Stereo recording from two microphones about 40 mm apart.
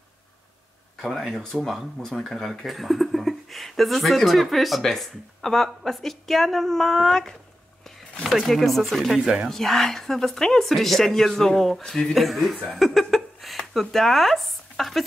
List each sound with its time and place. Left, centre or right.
1.0 s a woman's voice: centre
8.2 s speech: centre
9.1 s speech: centre
9.5 s a woman's voice: centre